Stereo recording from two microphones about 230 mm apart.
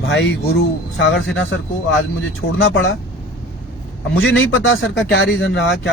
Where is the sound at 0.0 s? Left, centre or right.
Left.